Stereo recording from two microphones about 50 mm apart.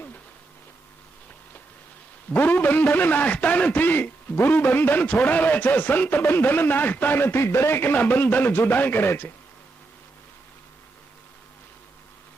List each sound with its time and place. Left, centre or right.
2.3 s a man's voice: left